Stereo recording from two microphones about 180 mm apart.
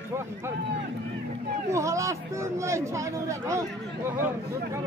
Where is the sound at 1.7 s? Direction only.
15° right (ahead or behind).